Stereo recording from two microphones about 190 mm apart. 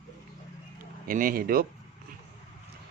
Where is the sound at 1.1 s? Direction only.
45° right (ahead or behind).